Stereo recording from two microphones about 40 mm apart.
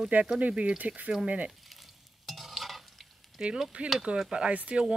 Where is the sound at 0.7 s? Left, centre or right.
Right.